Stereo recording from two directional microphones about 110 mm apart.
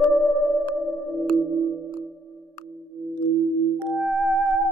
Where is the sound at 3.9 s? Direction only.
Centre (ahead or behind).